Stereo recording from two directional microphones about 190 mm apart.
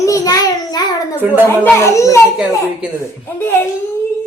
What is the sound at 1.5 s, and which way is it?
Speech, 15° left (ahead or behind).